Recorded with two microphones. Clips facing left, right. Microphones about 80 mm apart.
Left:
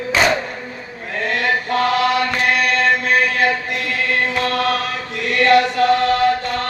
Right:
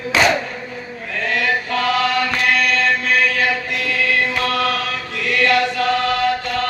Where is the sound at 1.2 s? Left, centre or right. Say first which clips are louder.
Left 1 dB; left.